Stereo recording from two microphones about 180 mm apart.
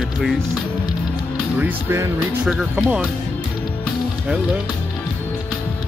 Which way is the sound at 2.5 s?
5° right (ahead or behind).